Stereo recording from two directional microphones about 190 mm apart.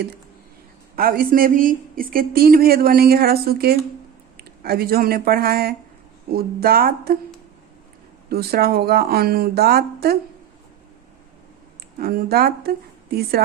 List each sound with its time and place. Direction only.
0.9 s a woman's voice: 50° right (ahead or behind)
8.3 s speech: 55° right (ahead or behind)
11.9 s a woman's voice: 50° right (ahead or behind)